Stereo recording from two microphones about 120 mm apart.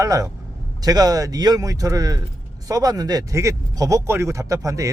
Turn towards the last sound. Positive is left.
turn(degrees=-30)  # may be behind; listen again after turning